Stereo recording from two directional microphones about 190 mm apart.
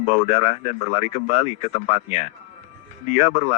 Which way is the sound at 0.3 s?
35° left (ahead or behind).